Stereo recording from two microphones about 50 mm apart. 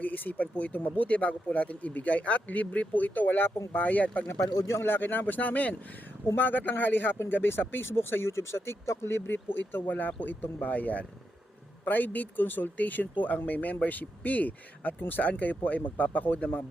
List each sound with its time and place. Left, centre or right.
0.0 s speech: left
4.3 s speech: left
9.5 s speech: left